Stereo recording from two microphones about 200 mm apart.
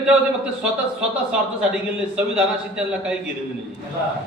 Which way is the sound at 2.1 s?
5° right (ahead or behind).